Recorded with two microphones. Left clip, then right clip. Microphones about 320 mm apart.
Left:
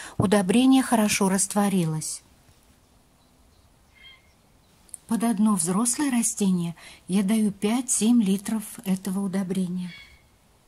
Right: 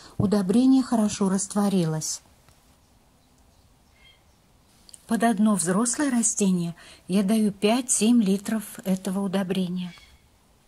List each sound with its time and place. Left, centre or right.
0.2 s speech: left
1.3 s speech: centre
1.8 s speech: centre
5.0 s speech: centre